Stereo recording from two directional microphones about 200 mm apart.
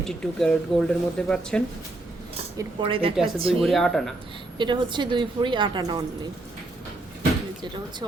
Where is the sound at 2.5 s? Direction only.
25° right (ahead or behind).